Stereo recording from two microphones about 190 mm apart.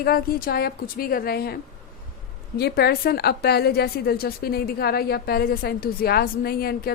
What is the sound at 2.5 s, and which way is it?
A woman's voice, 55° left (ahead or behind).